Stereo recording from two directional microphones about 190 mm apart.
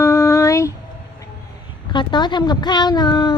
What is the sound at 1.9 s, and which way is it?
Speech, 25° left (ahead or behind).